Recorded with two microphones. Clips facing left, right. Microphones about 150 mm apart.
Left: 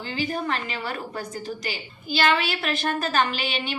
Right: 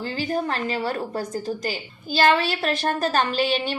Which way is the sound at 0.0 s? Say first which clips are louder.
Right 3 dB; 40° right (ahead or behind).